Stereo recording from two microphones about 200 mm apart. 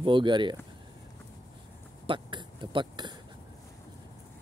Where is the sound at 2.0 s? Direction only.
25° right (ahead or behind).